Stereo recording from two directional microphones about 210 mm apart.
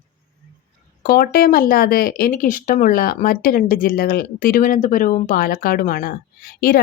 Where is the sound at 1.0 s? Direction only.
45° left (ahead or behind).